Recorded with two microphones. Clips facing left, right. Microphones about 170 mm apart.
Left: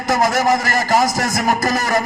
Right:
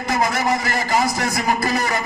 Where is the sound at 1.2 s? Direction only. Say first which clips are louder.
Left 3 dB; 45° left (ahead or behind).